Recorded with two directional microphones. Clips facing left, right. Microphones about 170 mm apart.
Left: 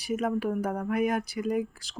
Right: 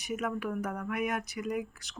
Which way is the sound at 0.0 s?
30° left (ahead or behind).